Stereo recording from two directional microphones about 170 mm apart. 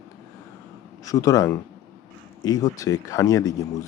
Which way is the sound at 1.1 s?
20° left (ahead or behind).